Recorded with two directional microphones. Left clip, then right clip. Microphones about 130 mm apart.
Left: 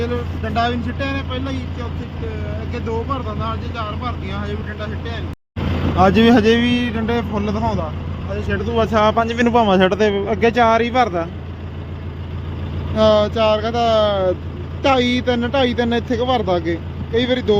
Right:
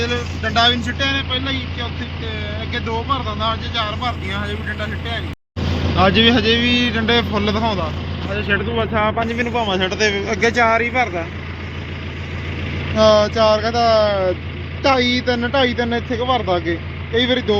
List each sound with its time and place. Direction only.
0.4 s speech: 10° left (ahead or behind)
6.1 s speech: 40° left (ahead or behind)
6.8 s speech: 15° left (ahead or behind)
8.3 s speech: 25° left (ahead or behind)
8.7 s speech: 65° left (ahead or behind); by 10.2 s 45° left (ahead or behind)
10.2 s speech: 35° left (ahead or behind)
13.0 s speech: 5° left (ahead or behind); by 17.6 s 20° left (ahead or behind)